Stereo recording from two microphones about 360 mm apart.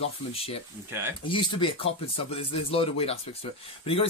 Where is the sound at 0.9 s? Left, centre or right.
Centre.